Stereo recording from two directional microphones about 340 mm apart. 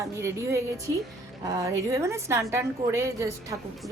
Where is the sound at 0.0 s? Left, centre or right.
Centre.